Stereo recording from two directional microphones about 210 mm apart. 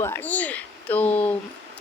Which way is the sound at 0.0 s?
10° left (ahead or behind).